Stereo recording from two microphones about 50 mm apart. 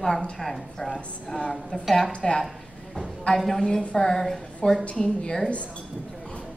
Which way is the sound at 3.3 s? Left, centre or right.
Centre.